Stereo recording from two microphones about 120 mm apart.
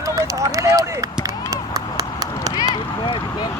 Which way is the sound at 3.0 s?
45° left (ahead or behind).